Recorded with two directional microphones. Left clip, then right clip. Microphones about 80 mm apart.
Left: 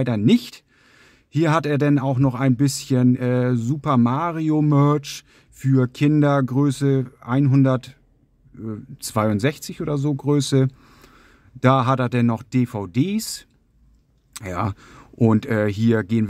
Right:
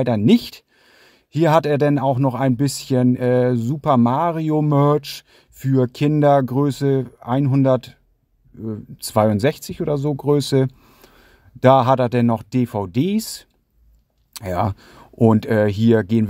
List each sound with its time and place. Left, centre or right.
0.0 s speech: right